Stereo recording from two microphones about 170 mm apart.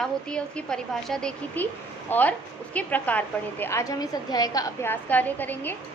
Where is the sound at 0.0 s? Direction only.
5° left (ahead or behind).